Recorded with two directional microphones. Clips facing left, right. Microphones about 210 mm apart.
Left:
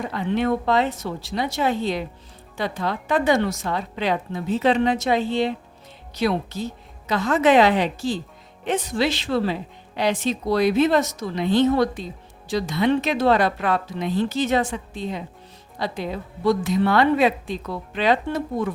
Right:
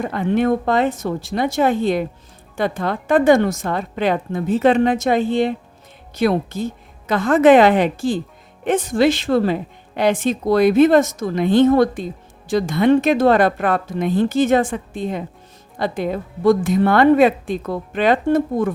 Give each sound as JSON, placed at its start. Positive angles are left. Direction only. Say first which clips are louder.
{"t": 0.0, "sound": "speech", "louder": "right 5 dB", "side_deg": -50}